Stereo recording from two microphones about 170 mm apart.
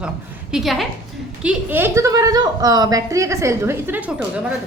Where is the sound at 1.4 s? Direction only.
10° right (ahead or behind).